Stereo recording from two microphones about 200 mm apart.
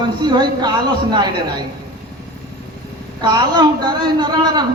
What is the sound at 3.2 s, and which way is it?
A woman's voice, 20° right (ahead or behind).